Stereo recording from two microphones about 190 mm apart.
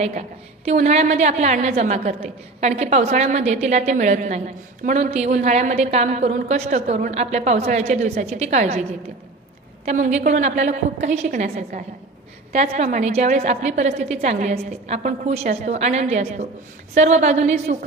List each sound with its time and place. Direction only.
0.0 s a woman's voice: 35° right (ahead or behind)
9.8 s a woman's voice: 40° right (ahead or behind)